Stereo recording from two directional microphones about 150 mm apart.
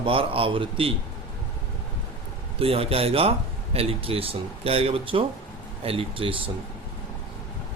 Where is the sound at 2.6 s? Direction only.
40° right (ahead or behind).